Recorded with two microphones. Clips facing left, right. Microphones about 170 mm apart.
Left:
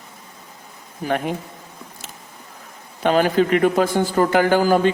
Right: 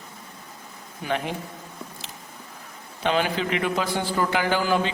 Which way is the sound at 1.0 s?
50° left (ahead or behind).